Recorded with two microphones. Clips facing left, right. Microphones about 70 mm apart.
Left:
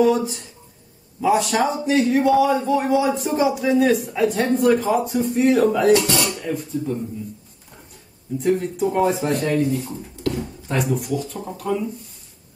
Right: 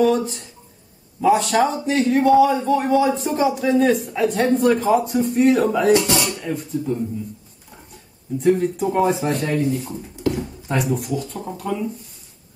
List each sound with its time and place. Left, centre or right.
0.0 s a man's voice: centre
5.9 s speech: centre
6.5 s a man's voice: centre
8.4 s a man's voice: centre
9.8 s speech: centre
10.4 s a man's voice: centre